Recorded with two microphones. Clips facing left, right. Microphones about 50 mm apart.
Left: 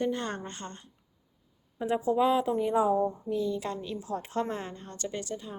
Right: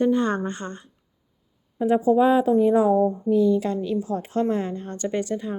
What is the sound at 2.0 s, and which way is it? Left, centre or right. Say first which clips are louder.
A woman's voice: right 7 dB; centre.